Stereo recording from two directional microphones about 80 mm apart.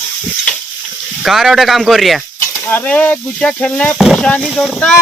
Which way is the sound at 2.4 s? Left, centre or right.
Left.